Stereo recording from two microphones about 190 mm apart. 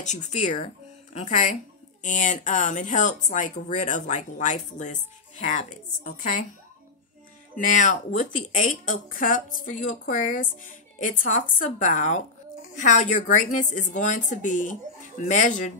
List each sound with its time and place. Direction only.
0.0 s speech: 40° left (ahead or behind)
7.5 s a woman's voice: 40° left (ahead or behind)